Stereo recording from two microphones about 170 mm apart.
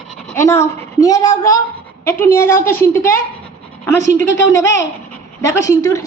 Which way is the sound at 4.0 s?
45° right (ahead or behind).